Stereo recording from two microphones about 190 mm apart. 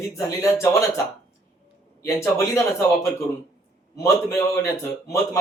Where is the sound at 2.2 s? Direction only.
15° left (ahead or behind).